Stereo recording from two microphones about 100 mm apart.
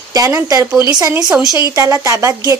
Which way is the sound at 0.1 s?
35° right (ahead or behind).